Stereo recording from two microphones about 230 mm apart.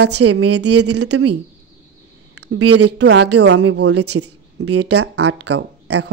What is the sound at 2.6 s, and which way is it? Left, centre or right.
Speech, right.